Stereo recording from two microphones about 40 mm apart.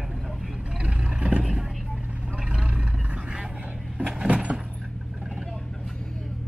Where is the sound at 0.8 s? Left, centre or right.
Right.